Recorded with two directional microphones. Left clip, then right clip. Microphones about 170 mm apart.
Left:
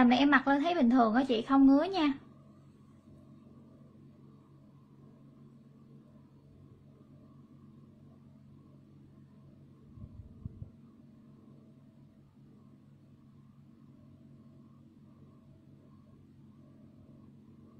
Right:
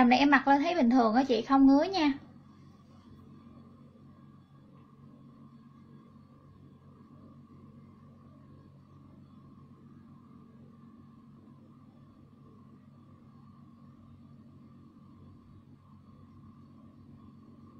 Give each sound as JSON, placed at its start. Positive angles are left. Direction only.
{"t": 0.0, "sound": "a woman's voice", "side_deg": 25}